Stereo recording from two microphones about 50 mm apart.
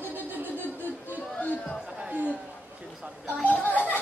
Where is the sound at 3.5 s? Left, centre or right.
Left.